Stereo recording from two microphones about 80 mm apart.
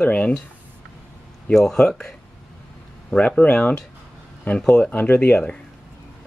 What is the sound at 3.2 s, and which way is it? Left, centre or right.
Speech, centre.